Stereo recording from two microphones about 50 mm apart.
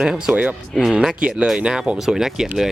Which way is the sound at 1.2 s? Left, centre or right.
Centre.